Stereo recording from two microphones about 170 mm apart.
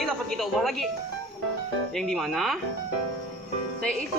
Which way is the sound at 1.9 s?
Centre (ahead or behind).